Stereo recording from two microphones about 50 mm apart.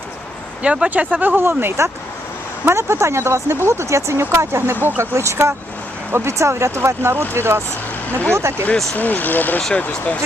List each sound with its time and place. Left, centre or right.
0.6 s speech: right
1.4 s speech: right
4.7 s speech: right
5.1 s speech: right
9.0 s speech: left